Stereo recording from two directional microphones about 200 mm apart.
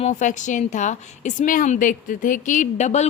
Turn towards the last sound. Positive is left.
turn(degrees=35)  # may be behind; listen again after turning